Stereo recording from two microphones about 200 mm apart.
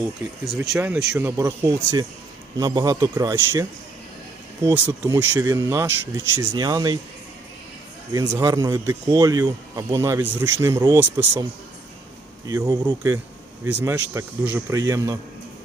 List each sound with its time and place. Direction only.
0.4 s speech: centre (ahead or behind)
1.4 s speech: 15° right (ahead or behind)
8.1 s speech: 10° right (ahead or behind)
12.5 s speech: 20° right (ahead or behind)
12.8 s speech: 5° right (ahead or behind)